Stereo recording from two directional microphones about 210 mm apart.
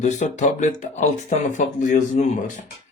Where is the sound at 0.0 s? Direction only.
35° left (ahead or behind).